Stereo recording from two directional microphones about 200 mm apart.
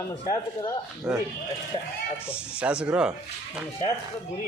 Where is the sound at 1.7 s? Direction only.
25° left (ahead or behind).